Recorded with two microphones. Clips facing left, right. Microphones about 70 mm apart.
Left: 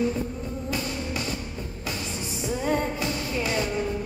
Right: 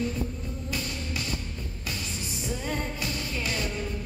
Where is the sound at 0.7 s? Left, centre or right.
Centre.